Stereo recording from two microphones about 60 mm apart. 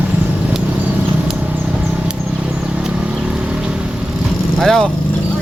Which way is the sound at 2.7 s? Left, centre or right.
Centre.